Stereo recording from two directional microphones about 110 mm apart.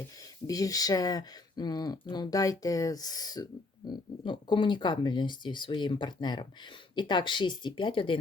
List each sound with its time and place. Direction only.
0.4 s speech: 35° left (ahead or behind)
4.2 s speech: 50° left (ahead or behind)